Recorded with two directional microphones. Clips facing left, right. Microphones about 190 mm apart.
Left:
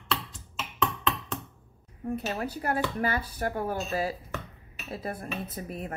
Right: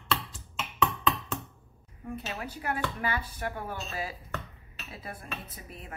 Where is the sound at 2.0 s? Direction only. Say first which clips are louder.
Left 6 dB; 40° left (ahead or behind).